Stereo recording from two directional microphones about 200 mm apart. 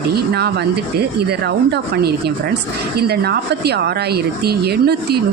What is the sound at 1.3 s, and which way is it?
Speech, 55° right (ahead or behind).